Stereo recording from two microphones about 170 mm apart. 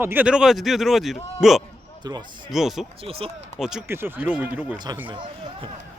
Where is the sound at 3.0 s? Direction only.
35° right (ahead or behind).